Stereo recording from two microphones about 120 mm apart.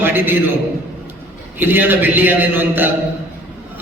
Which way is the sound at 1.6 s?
15° right (ahead or behind).